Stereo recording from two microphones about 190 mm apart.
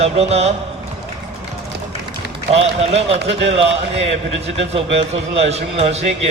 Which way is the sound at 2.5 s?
30° right (ahead or behind).